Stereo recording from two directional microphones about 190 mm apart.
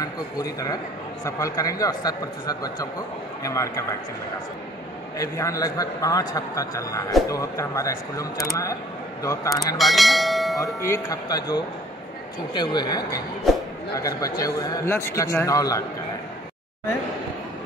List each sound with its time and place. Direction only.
0.0 s a man's voice: 20° left (ahead or behind)
5.2 s a man's voice: 15° left (ahead or behind)
9.8 s speech: centre (ahead or behind)
10.6 s speech: 15° left (ahead or behind)
13.5 s speech: centre (ahead or behind)
13.9 s a man's voice: 20° left (ahead or behind)